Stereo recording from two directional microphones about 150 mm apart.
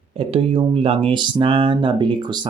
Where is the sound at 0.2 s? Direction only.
40° right (ahead or behind).